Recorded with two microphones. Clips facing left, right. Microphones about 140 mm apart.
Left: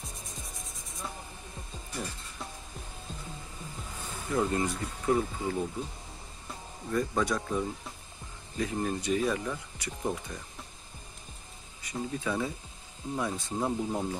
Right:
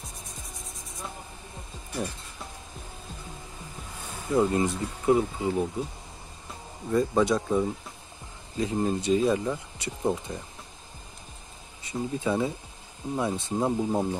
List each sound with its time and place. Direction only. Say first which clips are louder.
0.4 s insect: right 1 dB; centre (ahead or behind)
4.3 s speech: right 5 dB; 20° right (ahead or behind)
6.9 s speech: right 6 dB; 20° right (ahead or behind)
11.8 s speech: right 4 dB; 25° right (ahead or behind)